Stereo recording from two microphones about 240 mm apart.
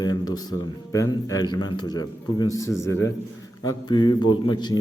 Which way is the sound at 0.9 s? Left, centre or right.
Centre.